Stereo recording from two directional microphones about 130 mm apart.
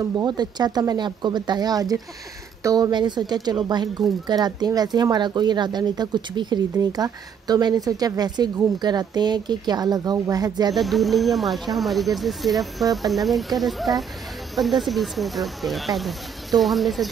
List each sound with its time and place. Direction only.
0.2 s speech: 30° right (ahead or behind)
10.7 s speech: centre (ahead or behind)